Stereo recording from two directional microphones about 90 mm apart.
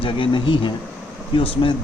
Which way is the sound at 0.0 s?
70° left (ahead or behind).